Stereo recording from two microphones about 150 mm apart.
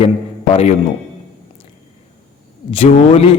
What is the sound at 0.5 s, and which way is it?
Speech, 50° left (ahead or behind).